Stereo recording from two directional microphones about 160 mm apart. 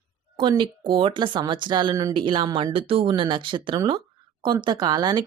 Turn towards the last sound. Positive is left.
turn(degrees=-25)  # may be behind; listen again after turning